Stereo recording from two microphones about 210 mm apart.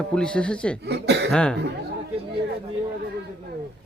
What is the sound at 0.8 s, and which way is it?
Speech, 55° right (ahead or behind).